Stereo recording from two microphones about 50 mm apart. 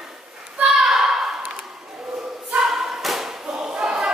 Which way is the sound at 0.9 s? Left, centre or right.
Centre.